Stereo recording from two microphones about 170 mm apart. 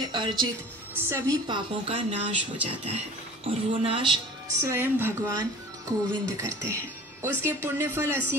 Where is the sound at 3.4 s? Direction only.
35° right (ahead or behind).